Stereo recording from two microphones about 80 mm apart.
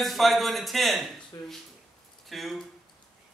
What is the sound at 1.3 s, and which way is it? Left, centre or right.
Speech, left.